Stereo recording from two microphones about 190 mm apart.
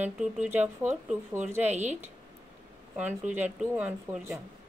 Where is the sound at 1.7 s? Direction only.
35° right (ahead or behind).